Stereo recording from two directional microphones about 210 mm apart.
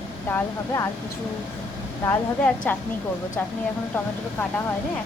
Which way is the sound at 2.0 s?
5° left (ahead or behind).